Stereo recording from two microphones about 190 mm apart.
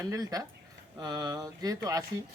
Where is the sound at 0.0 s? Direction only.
15° right (ahead or behind).